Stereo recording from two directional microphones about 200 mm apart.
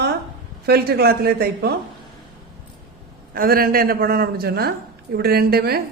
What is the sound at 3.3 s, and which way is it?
A woman's voice, 45° right (ahead or behind).